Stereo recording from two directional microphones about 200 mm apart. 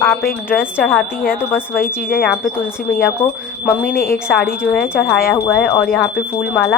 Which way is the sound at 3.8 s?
45° left (ahead or behind).